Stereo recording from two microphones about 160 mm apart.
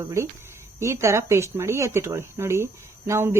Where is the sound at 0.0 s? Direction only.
20° right (ahead or behind).